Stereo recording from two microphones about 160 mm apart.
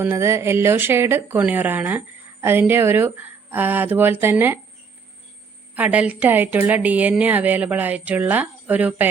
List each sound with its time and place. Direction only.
0.0 s speech: 15° right (ahead or behind)
5.7 s speech: 10° right (ahead or behind)